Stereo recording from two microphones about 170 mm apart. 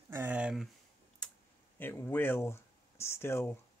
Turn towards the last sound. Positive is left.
turn(degrees=15)  # may be behind; listen again after turning